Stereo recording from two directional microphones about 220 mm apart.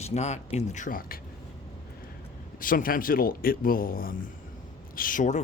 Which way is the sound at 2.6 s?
40° left (ahead or behind).